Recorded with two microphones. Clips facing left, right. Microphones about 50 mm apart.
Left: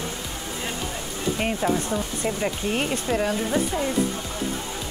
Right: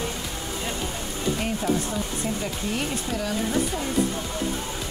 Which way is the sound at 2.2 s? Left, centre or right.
Left.